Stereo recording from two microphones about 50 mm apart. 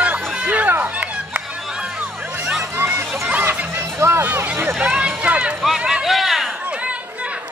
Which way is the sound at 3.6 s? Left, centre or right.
Right.